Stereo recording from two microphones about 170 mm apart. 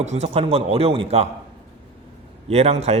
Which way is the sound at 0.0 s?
40° right (ahead or behind).